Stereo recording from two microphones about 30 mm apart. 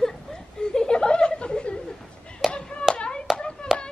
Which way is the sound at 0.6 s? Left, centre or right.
Left.